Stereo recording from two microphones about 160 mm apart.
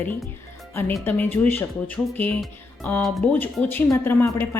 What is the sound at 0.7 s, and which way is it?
A woman's voice, 15° left (ahead or behind).